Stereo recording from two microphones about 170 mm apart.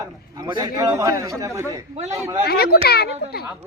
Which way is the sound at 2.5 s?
65° left (ahead or behind).